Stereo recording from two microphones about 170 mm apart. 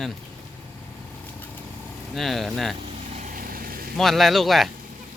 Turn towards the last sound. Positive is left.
turn(degrees=0)  # may be behind; listen again after turning